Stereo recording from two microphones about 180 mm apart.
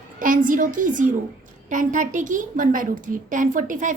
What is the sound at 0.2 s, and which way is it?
A woman's voice, 50° right (ahead or behind).